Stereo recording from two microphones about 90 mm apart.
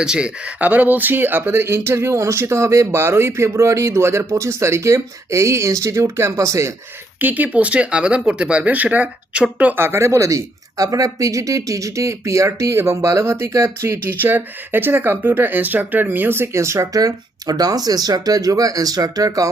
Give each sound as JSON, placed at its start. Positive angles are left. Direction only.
{"t": 0.0, "sound": "speech", "side_deg": -10}
{"t": 7.2, "sound": "speech", "side_deg": -20}